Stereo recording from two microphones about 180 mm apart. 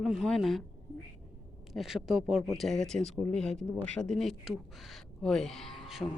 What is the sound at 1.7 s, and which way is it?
Speech, centre (ahead or behind).